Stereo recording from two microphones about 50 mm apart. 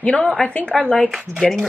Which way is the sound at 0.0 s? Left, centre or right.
Left.